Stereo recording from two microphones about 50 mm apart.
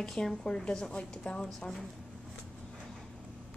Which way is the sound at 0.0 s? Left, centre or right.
Centre.